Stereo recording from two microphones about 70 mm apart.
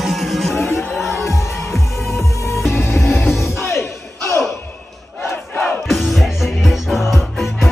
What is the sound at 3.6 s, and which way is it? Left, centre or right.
Battle cry, left.